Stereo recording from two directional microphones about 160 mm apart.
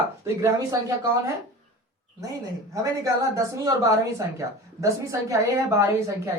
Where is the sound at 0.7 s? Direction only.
20° right (ahead or behind).